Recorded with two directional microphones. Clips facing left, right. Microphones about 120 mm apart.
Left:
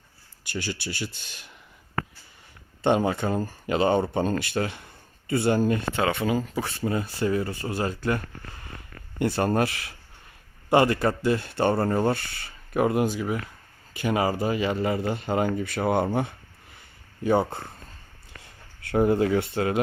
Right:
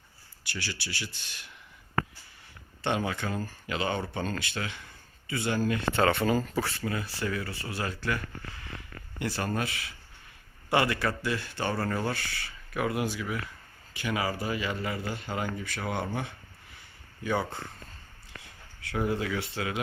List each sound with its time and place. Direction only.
0.5 s speech: 45° left (ahead or behind)
2.9 s speech: 35° left (ahead or behind)
6.0 s speech: 10° left (ahead or behind); by 7.5 s 30° left (ahead or behind)
7.5 s speech: 40° left (ahead or behind)
9.2 s speech: 30° left (ahead or behind)
9.6 s speech: 55° left (ahead or behind)
10.7 s speech: 40° left (ahead or behind)
11.5 s speech: 30° left (ahead or behind)
12.7 s speech: 45° left (ahead or behind)
17.2 s speech: 35° left (ahead or behind)
18.8 s speech: 45° left (ahead or behind)